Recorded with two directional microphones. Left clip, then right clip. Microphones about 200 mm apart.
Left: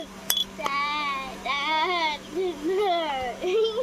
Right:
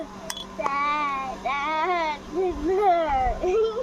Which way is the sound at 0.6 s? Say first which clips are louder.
Right 2 dB; 10° right (ahead or behind).